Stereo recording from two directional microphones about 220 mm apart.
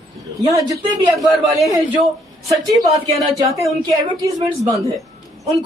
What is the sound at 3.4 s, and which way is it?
A man's voice, 15° right (ahead or behind).